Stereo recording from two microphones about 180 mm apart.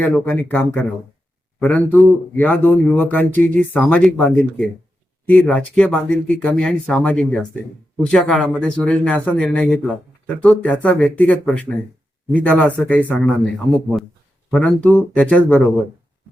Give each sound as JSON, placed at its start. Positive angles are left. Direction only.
{"t": 0.0, "sound": "speech", "side_deg": 10}
{"t": 14.5, "sound": "speech", "side_deg": 5}